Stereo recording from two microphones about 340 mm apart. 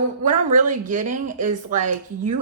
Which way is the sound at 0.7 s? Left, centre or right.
Right.